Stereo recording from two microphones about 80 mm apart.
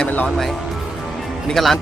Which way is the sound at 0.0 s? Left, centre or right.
Left.